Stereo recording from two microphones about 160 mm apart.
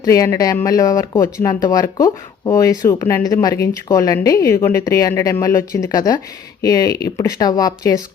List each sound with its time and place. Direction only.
0.0 s speech: 20° left (ahead or behind)